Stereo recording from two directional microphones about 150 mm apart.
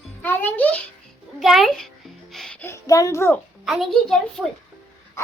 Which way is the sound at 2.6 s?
20° left (ahead or behind).